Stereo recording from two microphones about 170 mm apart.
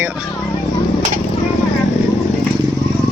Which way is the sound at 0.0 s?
5° right (ahead or behind).